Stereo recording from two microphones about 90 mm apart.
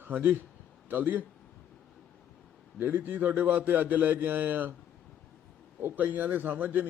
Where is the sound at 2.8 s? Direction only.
20° right (ahead or behind).